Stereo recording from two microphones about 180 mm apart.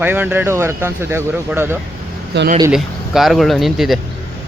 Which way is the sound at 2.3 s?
70° right (ahead or behind).